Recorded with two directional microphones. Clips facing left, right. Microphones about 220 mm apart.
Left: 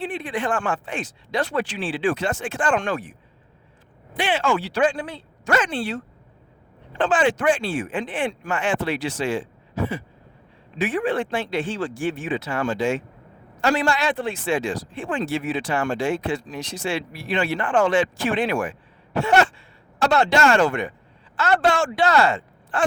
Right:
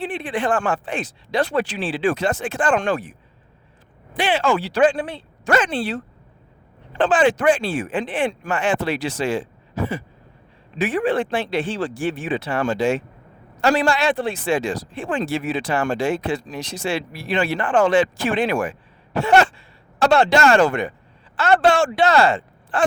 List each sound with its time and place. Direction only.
0.0 s speech: 30° right (ahead or behind)
4.2 s speech: 35° right (ahead or behind)
7.0 s speech: 35° right (ahead or behind)
17.1 s speech: 90° right
17.3 s speech: 35° right (ahead or behind)